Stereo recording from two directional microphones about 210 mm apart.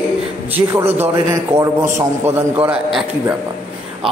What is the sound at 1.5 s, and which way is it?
A man's voice, 10° right (ahead or behind).